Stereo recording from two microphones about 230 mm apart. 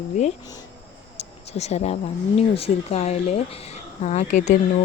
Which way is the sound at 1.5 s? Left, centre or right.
Left.